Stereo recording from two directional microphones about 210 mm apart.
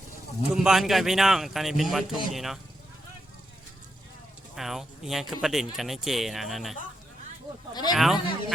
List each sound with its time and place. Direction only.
0.5 s speech: centre (ahead or behind)
4.5 s speech: centre (ahead or behind)
7.7 s speech: 20° left (ahead or behind)
7.9 s speech: centre (ahead or behind)